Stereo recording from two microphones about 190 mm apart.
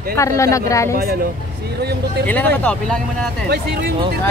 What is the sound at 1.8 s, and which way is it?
Speech, 60° right (ahead or behind).